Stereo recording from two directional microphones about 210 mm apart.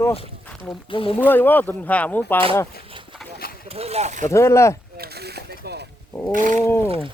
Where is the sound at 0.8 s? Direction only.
25° left (ahead or behind).